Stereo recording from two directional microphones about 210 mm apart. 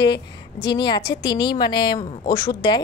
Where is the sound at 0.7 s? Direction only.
20° left (ahead or behind).